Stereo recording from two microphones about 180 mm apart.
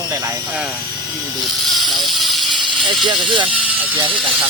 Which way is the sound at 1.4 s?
Centre (ahead or behind).